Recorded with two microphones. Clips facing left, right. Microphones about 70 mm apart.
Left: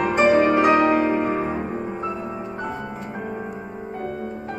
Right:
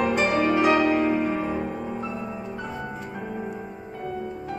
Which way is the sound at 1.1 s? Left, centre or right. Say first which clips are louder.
Left 3 dB; left.